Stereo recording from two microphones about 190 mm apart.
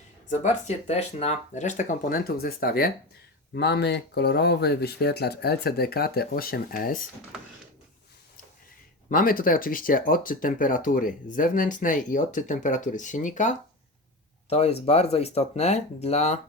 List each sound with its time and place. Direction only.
0.3 s speech: 35° left (ahead or behind)
9.0 s speech: 45° left (ahead or behind)